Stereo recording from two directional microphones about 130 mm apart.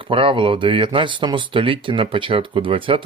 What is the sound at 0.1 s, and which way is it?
Speech, 45° right (ahead or behind).